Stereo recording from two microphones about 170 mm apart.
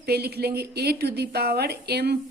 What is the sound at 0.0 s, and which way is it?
A woman's voice, 70° right (ahead or behind).